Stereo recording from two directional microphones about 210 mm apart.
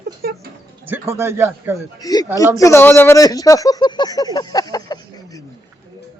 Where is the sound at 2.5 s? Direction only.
15° left (ahead or behind).